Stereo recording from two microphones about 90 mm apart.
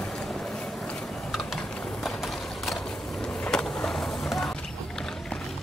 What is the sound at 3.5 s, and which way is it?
Skateboard, 5° left (ahead or behind).